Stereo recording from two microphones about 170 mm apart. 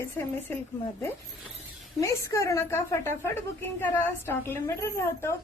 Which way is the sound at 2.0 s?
20° left (ahead or behind).